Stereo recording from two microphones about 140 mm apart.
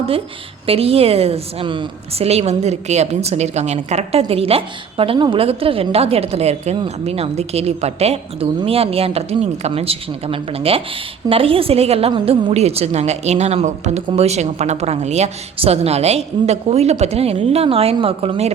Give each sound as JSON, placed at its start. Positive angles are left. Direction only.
{"t": 0.7, "sound": "a woman's voice", "side_deg": -45}